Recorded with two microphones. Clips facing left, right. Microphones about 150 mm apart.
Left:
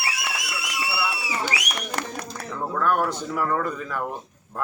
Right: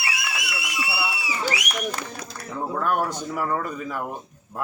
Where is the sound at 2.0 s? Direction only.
65° left (ahead or behind).